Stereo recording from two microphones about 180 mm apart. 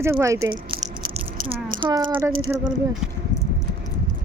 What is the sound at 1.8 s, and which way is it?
Speech, 25° right (ahead or behind).